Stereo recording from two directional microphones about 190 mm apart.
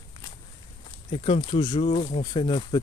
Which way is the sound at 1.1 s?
30° left (ahead or behind).